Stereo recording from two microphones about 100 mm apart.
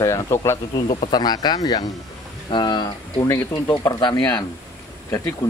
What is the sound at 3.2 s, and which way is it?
Speech, 35° left (ahead or behind).